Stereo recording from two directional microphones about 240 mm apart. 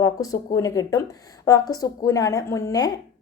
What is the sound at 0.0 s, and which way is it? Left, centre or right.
A woman's voice, centre.